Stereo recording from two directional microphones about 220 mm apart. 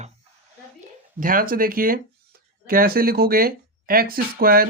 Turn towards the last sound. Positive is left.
turn(degrees=-40)  # may be behind; listen again after turning